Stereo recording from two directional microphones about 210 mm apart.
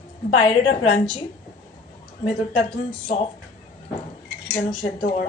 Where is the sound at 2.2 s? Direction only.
25° left (ahead or behind).